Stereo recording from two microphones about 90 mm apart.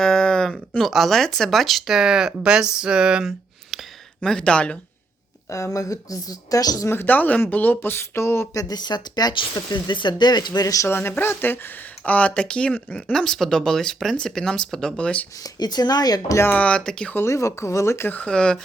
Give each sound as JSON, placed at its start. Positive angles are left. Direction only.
{"t": 0.0, "sound": "speech", "side_deg": 5}
{"t": 4.2, "sound": "speech", "side_deg": 10}
{"t": 5.5, "sound": "speech", "side_deg": 35}
{"t": 6.9, "sound": "speech", "side_deg": 20}
{"t": 8.5, "sound": "speech", "side_deg": 50}
{"t": 10.8, "sound": "speech", "side_deg": 25}
{"t": 13.1, "sound": "speech", "side_deg": 5}
{"t": 15.4, "sound": "speech", "side_deg": 50}
{"t": 16.4, "sound": "speech", "side_deg": 20}
{"t": 17.2, "sound": "speech", "side_deg": 35}
{"t": 18.2, "sound": "speech", "side_deg": 10}